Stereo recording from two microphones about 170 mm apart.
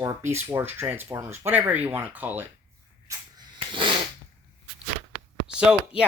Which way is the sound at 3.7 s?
30° right (ahead or behind).